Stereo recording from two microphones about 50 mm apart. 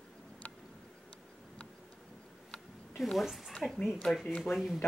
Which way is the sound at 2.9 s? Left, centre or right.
Centre.